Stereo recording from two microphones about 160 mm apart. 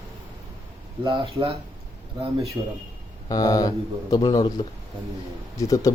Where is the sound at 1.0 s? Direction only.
30° right (ahead or behind).